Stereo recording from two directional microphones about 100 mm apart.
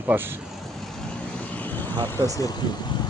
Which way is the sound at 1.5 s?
20° left (ahead or behind).